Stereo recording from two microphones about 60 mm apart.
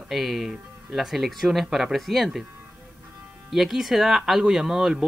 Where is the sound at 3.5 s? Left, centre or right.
Centre.